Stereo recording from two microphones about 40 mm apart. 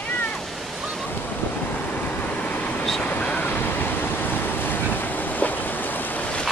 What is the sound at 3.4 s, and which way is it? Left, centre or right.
Vehicle, left.